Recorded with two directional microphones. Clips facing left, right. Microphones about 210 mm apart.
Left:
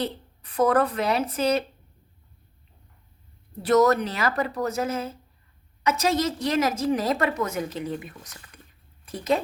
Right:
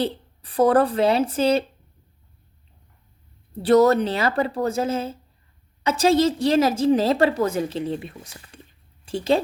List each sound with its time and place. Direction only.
0.0 s a woman's voice: 30° right (ahead or behind)
3.6 s a woman's voice: 30° right (ahead or behind)